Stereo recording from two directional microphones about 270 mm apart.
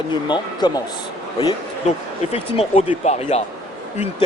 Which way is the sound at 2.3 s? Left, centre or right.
Left.